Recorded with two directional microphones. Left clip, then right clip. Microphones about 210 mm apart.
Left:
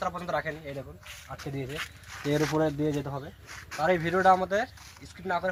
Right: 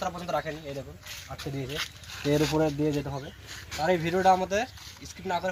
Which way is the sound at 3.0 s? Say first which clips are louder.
Right 1 dB; 10° right (ahead or behind).